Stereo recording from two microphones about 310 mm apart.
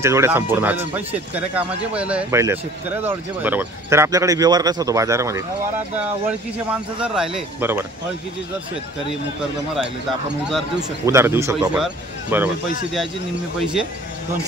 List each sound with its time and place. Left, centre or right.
0.0 s speech: centre
10.5 s speech: centre